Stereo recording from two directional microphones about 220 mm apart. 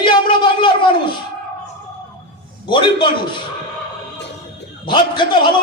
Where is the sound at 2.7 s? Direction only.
20° left (ahead or behind).